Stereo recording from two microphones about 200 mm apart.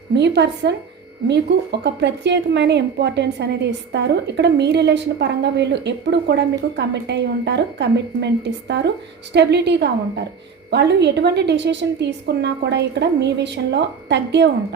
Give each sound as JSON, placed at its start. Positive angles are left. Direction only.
{"t": 0.1, "sound": "a woman's voice", "side_deg": -60}